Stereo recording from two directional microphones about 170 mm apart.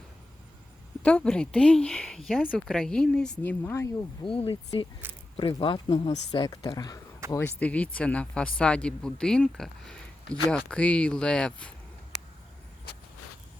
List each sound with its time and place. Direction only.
1.0 s speech: 5° left (ahead or behind)
4.2 s speech: 30° left (ahead or behind); by 11.7 s 5° left (ahead or behind)
12.1 s a sound: 40° left (ahead or behind)